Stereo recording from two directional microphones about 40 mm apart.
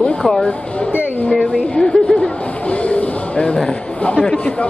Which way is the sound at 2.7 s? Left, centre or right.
Left.